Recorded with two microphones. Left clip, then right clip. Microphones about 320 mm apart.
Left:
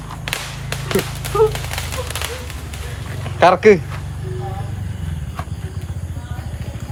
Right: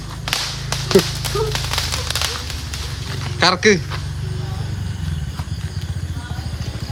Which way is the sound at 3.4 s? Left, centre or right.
Centre.